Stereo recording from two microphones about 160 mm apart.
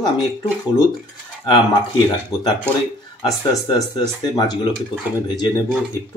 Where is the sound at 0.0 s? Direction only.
25° left (ahead or behind).